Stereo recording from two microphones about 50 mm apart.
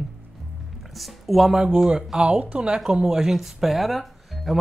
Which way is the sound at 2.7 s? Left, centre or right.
Centre.